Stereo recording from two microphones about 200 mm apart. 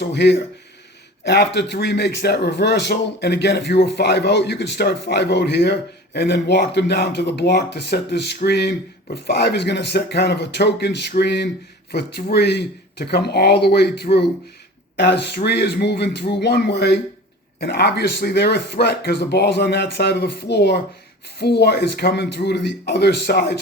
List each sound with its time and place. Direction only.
0.0 s a man's voice: 60° left (ahead or behind)